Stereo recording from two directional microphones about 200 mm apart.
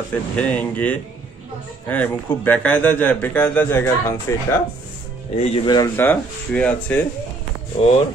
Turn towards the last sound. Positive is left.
turn(degrees=30)  # may be behind; listen again after turning